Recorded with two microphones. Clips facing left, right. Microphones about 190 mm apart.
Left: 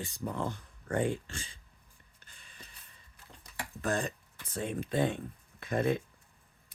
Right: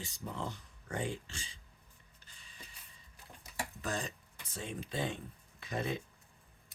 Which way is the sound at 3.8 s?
55° left (ahead or behind).